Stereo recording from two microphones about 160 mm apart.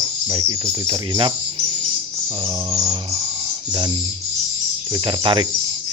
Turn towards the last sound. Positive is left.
turn(degrees=-30)  # may be behind; listen again after turning